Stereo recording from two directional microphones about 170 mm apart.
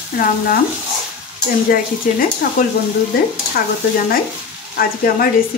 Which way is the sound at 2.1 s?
50° left (ahead or behind).